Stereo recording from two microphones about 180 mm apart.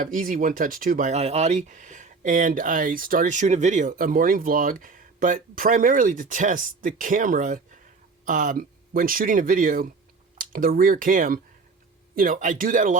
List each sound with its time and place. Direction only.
0.0 s speech: 50° right (ahead or behind)